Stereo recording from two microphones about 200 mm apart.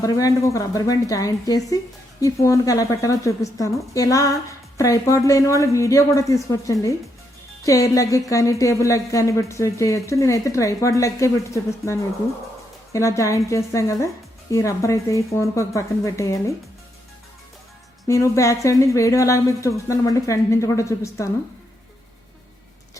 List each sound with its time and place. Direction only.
0.0 s speech: 15° left (ahead or behind)
18.1 s speech: 15° left (ahead or behind)